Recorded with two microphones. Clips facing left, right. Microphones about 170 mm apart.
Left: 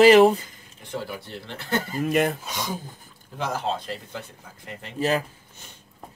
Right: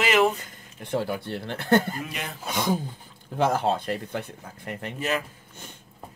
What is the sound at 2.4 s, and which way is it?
Speech, 55° right (ahead or behind).